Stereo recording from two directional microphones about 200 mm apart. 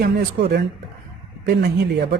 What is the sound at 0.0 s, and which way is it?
Speech, 50° right (ahead or behind).